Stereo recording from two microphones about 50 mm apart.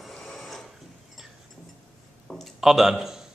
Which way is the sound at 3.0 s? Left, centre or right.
Centre.